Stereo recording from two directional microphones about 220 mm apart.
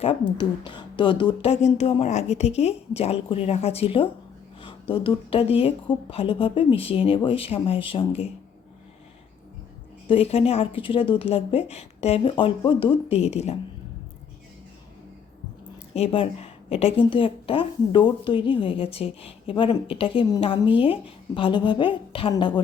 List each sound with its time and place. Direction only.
0.0 s a woman's voice: 20° left (ahead or behind)
10.1 s a woman's voice: 25° left (ahead or behind)
16.0 s a woman's voice: 25° left (ahead or behind)